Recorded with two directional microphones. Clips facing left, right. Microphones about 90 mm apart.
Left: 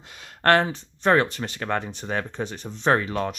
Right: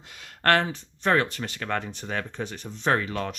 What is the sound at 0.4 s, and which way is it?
Speech, 30° left (ahead or behind).